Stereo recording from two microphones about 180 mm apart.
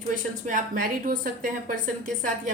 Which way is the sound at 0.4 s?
45° right (ahead or behind).